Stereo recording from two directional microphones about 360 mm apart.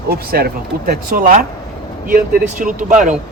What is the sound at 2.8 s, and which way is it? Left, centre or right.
Speech, right.